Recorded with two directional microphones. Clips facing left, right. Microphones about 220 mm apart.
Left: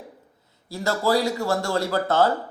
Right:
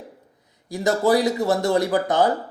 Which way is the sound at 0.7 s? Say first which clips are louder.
Right 3 dB; 20° right (ahead or behind).